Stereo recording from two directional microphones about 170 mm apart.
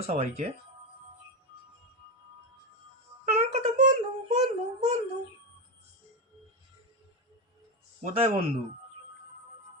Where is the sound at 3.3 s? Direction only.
40° right (ahead or behind).